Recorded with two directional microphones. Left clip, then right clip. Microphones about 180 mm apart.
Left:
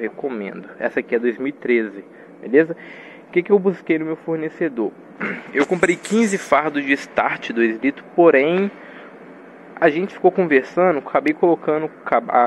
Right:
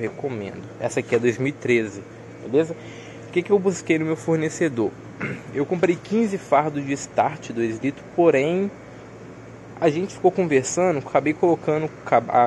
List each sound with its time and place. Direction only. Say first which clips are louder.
0.3 s speech: left 3 dB; centre (ahead or behind)
0.9 s speech: right 1 dB; 15° right (ahead or behind)
3.3 s speech: left 3 dB; 5° right (ahead or behind)
5.2 s speech: left 6 dB; centre (ahead or behind)
9.8 s speech: left 4 dB; 5° right (ahead or behind)